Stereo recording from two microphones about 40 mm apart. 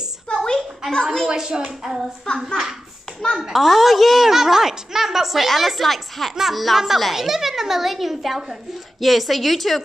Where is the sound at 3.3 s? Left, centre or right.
Centre.